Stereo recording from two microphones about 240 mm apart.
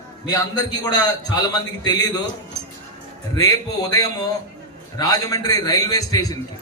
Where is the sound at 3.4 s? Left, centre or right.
Centre.